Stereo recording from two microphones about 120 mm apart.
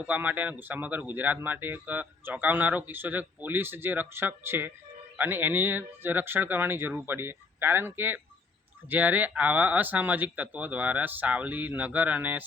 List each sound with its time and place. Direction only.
0.0 s a man's voice: 15° right (ahead or behind)